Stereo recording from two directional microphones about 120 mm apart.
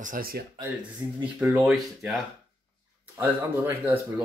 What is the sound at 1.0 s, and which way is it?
Speech, 25° right (ahead or behind).